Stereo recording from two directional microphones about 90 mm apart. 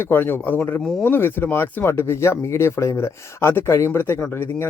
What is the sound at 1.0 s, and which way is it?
Speech, 25° left (ahead or behind).